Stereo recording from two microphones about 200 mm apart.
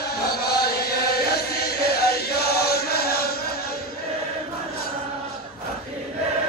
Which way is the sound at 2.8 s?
50° left (ahead or behind).